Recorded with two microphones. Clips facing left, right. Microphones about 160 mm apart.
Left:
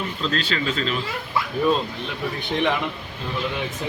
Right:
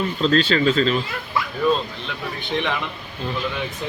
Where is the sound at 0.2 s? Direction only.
30° right (ahead or behind).